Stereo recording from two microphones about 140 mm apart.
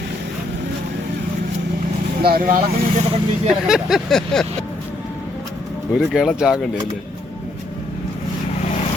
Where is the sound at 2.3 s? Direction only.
80° right.